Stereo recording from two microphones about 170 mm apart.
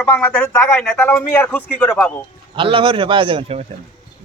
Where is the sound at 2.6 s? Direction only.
30° right (ahead or behind).